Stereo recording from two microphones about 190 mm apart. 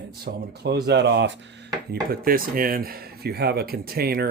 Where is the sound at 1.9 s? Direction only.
50° right (ahead or behind).